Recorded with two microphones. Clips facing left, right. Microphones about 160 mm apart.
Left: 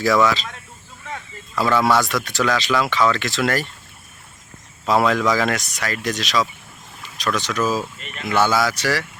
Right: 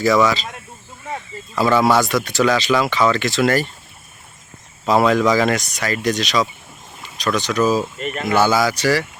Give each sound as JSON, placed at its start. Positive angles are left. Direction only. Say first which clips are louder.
{"t": 0.0, "sound": "speech", "louder": "right 2 dB", "side_deg": 0}
{"t": 1.5, "sound": "speech", "louder": "right 2 dB", "side_deg": 0}
{"t": 4.9, "sound": "speech", "louder": "right 3 dB", "side_deg": 0}
{"t": 7.9, "sound": "speech", "louder": "right 9 dB", "side_deg": -45}
{"t": 8.3, "sound": "speech", "louder": "right 2 dB", "side_deg": 0}